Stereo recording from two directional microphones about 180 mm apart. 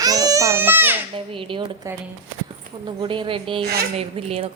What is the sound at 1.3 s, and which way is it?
A woman's voice, 30° right (ahead or behind).